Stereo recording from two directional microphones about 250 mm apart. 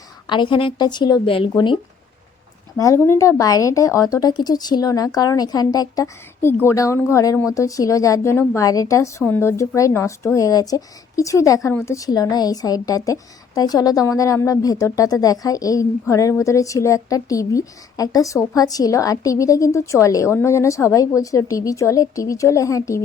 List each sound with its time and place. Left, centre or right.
0.3 s speech: centre